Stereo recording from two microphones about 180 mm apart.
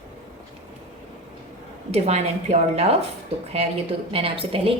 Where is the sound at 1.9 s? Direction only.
35° right (ahead or behind).